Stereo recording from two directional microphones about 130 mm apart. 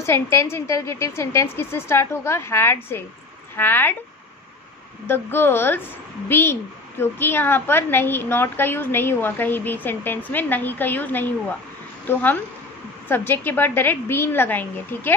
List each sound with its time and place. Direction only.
0.0 s a woman's voice: 20° left (ahead or behind)
5.0 s a woman's voice: 15° left (ahead or behind)